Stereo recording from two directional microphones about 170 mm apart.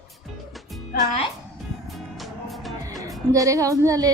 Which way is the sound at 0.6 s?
Centre (ahead or behind).